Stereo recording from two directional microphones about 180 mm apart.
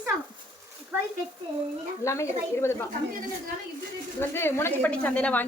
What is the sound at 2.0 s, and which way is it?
Speech, 15° left (ahead or behind).